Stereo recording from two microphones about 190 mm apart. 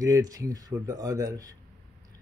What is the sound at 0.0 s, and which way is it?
Speech, 20° right (ahead or behind).